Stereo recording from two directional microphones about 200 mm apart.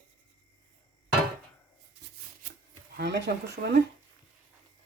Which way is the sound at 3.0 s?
60° right (ahead or behind).